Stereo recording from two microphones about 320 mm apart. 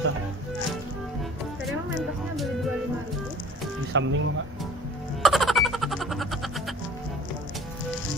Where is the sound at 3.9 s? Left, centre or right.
Right.